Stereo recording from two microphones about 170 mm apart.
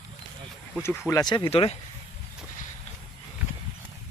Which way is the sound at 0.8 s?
15° left (ahead or behind).